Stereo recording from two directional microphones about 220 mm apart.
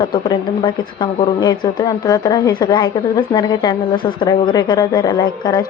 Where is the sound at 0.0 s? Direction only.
20° left (ahead or behind).